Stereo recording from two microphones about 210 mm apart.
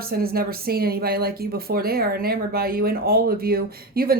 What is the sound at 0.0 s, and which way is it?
Speech, 45° right (ahead or behind).